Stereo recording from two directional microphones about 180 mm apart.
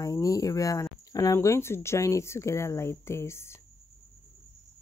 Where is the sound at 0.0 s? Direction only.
20° left (ahead or behind).